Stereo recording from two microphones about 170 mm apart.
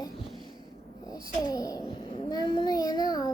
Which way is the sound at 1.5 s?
20° left (ahead or behind).